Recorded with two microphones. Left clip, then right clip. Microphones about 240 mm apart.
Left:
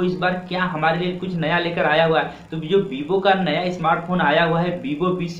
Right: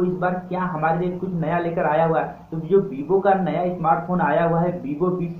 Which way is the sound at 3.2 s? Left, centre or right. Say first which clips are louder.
Left 4 dB; centre.